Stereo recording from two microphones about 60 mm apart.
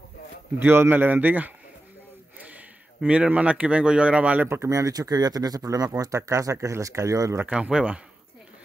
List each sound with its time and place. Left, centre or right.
0.6 s a man's voice: right
4.5 s speech: right
5.9 s speech: right
7.4 s speech: centre